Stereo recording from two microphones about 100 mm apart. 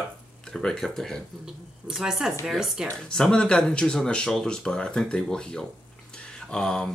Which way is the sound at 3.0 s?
10° left (ahead or behind).